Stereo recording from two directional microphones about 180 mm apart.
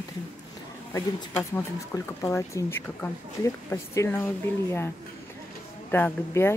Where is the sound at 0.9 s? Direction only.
15° left (ahead or behind).